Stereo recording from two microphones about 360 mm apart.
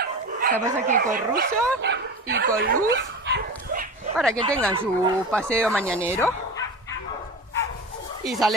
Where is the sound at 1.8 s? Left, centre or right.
Right.